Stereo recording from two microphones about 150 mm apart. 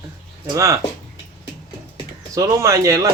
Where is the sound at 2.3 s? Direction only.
20° right (ahead or behind).